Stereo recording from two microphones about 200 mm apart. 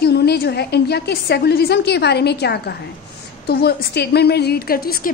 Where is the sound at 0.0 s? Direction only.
55° left (ahead or behind).